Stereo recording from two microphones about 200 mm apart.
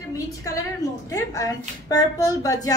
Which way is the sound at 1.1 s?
15° left (ahead or behind).